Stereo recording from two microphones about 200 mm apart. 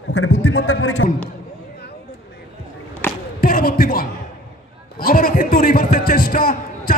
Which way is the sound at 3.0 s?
10° left (ahead or behind).